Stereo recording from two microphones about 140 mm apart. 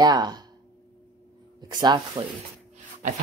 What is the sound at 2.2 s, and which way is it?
Speech, 35° right (ahead or behind).